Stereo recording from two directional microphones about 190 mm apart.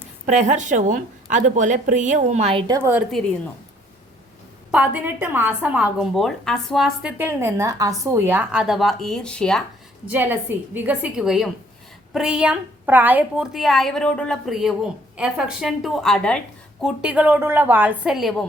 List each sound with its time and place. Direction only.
0.3 s a woman's voice: 40° right (ahead or behind)
2.7 s a woman's voice: 10° right (ahead or behind)
4.7 s a woman's voice: 10° right (ahead or behind)
10.1 s a woman's voice: 10° right (ahead or behind)